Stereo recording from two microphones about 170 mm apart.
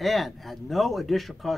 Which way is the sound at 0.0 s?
Centre (ahead or behind).